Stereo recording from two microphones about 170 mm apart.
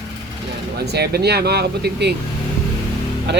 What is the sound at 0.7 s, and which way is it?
Speech, 70° right (ahead or behind).